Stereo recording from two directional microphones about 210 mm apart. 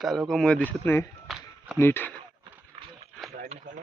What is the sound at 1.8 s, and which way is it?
Speech, 10° left (ahead or behind).